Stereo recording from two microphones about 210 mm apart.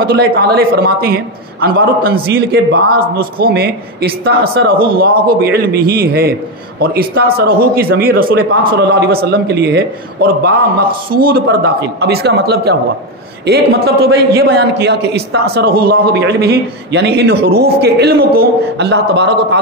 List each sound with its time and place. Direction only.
0.0 s a man's voice: 50° right (ahead or behind)